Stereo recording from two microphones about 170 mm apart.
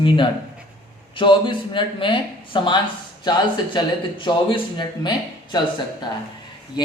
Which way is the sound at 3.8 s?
30° left (ahead or behind).